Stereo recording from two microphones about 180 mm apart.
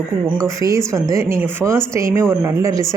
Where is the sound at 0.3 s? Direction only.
15° right (ahead or behind).